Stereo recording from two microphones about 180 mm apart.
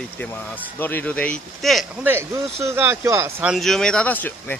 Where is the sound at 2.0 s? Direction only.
15° right (ahead or behind).